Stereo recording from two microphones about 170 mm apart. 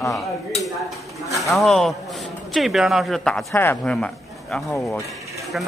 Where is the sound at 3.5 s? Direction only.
15° left (ahead or behind).